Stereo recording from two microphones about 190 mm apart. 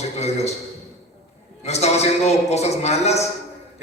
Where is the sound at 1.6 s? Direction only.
35° left (ahead or behind).